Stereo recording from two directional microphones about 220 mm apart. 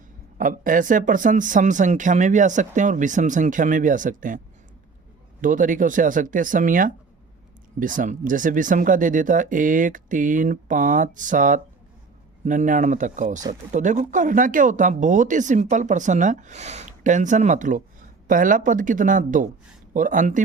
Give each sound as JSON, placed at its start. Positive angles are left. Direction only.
{"t": 0.3, "sound": "speech", "side_deg": -35}
{"t": 5.4, "sound": "speech", "side_deg": -35}